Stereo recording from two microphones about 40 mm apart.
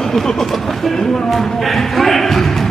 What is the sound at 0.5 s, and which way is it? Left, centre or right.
Speech, centre.